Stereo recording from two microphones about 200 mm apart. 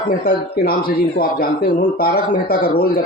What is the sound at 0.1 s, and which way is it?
Speech, 45° left (ahead or behind).